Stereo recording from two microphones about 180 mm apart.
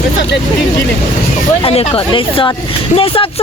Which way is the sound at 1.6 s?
30° left (ahead or behind).